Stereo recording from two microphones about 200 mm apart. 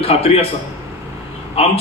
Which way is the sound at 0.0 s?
30° left (ahead or behind).